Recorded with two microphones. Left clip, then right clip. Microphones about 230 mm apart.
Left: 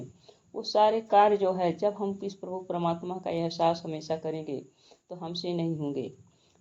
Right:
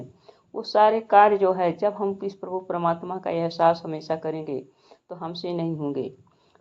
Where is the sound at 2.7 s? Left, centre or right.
Right.